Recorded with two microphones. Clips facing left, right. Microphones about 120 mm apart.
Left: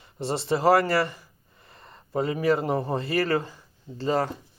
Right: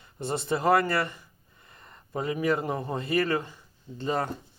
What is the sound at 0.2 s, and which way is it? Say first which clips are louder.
Speech: left 3 dB; 25° left (ahead or behind).